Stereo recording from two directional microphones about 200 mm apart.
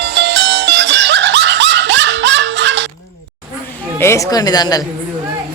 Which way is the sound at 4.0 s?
15° left (ahead or behind).